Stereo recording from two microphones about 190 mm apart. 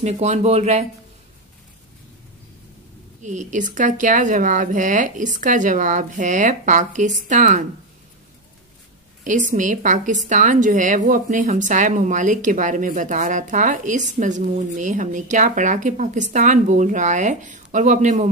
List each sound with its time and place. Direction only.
0.0 s a woman's voice: 35° right (ahead or behind)
3.2 s a woman's voice: 40° right (ahead or behind)
9.2 s a woman's voice: 40° right (ahead or behind)